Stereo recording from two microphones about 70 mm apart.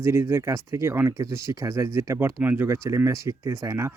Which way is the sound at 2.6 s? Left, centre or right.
Right.